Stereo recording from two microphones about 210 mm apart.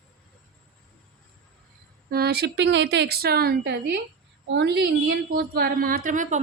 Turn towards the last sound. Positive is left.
turn(degrees=-35)  # may be behind; listen again after turning